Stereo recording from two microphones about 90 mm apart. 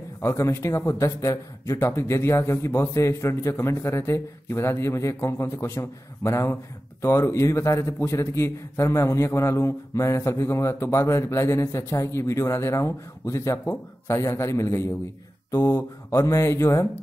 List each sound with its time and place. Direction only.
0.2 s a man's voice: 30° left (ahead or behind)